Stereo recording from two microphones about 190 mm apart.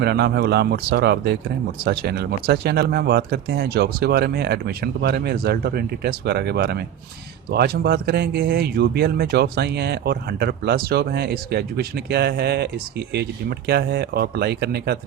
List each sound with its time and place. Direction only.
0.0 s speech: 60° right (ahead or behind)